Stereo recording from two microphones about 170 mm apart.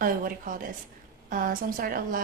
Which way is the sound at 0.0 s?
55° right (ahead or behind).